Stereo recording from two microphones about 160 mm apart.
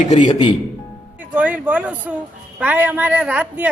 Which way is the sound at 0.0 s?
45° left (ahead or behind).